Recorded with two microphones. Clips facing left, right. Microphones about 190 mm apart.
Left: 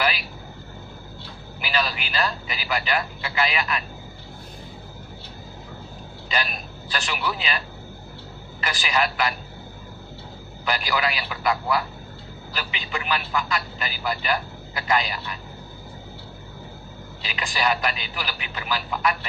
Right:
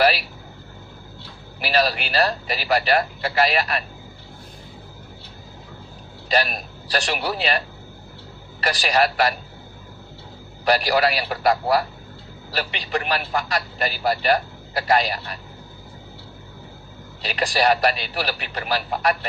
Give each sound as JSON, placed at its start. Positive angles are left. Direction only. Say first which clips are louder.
{"t": 1.6, "sound": "a man's voice", "louder": "right 6 dB", "side_deg": -40}
{"t": 6.3, "sound": "a man's voice", "louder": "right 6 dB", "side_deg": -40}
{"t": 8.6, "sound": "a man's voice", "louder": "right 5 dB", "side_deg": -40}
{"t": 10.7, "sound": "a man's voice", "louder": "right 7 dB", "side_deg": -40}
{"t": 17.2, "sound": "a man's voice", "louder": "right 6 dB", "side_deg": -40}